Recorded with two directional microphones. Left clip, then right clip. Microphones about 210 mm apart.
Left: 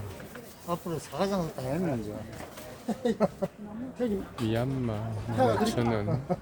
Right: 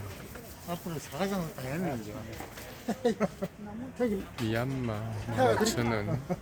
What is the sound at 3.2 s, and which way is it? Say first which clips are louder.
Speech: left 4 dB; 20° left (ahead or behind).